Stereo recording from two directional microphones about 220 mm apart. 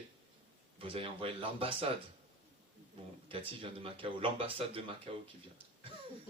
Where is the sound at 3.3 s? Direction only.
25° right (ahead or behind).